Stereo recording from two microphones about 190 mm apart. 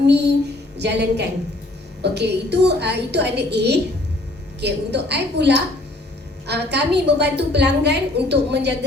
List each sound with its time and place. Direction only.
0.0 s a woman's voice: 60° right (ahead or behind)